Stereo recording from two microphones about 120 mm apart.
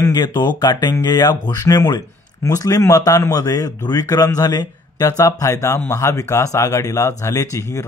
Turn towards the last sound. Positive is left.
turn(degrees=25)  # may be behind; listen again after turning